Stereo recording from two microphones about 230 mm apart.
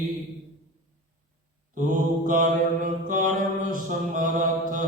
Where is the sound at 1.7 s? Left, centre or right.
Right.